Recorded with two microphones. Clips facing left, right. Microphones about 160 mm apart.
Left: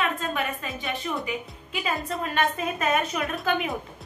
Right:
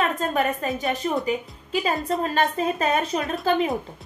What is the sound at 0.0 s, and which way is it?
Music, 40° right (ahead or behind).